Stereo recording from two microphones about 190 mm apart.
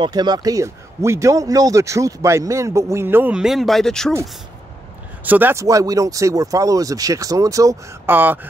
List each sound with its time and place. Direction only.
0.0 s speech: 20° right (ahead or behind); by 4.1 s centre (ahead or behind)
5.2 s speech: 10° right (ahead or behind)